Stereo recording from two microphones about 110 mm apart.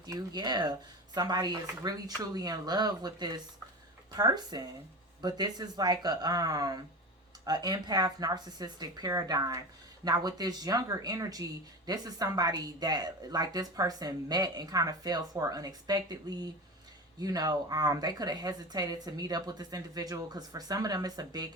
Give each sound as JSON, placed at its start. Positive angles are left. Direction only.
{"t": 0.0, "sound": "a woman's voice", "side_deg": -40}